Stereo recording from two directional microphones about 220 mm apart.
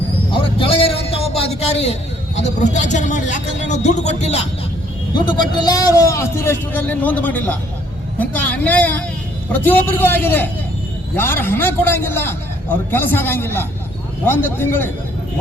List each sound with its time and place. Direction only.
0.3 s a man's voice: 25° left (ahead or behind)